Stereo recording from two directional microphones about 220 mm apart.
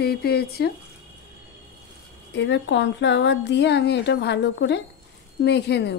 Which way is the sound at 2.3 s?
55° left (ahead or behind).